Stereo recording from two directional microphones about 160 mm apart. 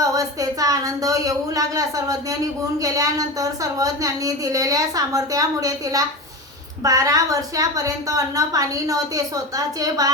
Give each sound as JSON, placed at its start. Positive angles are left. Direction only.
{"t": 0.0, "sound": "speech", "side_deg": -20}